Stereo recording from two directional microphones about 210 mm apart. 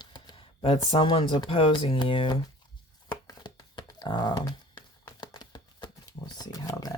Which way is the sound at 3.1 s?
20° left (ahead or behind).